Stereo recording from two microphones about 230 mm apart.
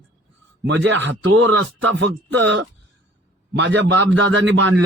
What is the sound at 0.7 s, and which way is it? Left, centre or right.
Speech, right.